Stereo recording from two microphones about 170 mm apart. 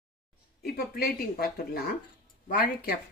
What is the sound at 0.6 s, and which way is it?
Speech, 65° left (ahead or behind).